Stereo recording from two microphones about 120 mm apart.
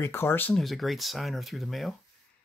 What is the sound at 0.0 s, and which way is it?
Speech, 20° left (ahead or behind).